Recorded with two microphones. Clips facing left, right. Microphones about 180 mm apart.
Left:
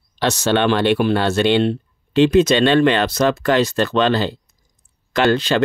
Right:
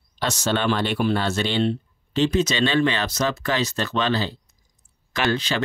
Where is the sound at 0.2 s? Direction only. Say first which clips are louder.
Left 6 dB; 70° left (ahead or behind).